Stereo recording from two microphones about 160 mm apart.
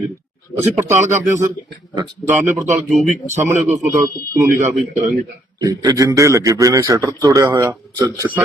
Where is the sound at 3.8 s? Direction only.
20° right (ahead or behind).